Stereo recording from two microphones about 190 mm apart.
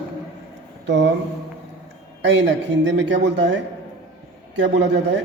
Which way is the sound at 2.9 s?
75° right (ahead or behind).